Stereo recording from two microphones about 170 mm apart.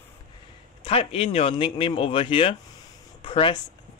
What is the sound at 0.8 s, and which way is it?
Speech, 35° left (ahead or behind).